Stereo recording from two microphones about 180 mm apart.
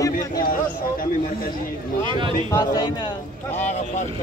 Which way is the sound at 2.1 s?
25° right (ahead or behind).